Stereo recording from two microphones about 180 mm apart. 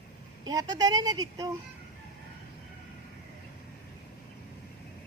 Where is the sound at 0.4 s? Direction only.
20° right (ahead or behind).